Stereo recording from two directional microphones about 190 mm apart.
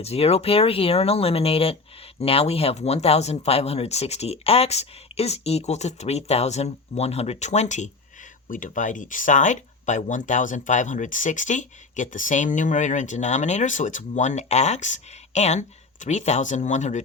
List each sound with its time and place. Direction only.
0.0 s speech: 35° left (ahead or behind)